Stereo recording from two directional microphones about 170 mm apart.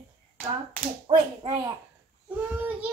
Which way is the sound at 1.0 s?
30° right (ahead or behind).